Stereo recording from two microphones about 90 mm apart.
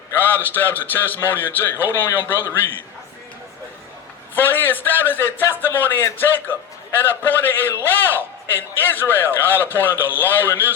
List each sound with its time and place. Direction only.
0.1 s a man's voice: 25° left (ahead or behind)
4.4 s a man's voice: 25° left (ahead or behind)